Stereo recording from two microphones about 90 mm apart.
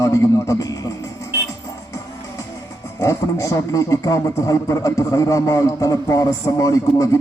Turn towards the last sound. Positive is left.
turn(degrees=40)  # may be behind; listen again after turning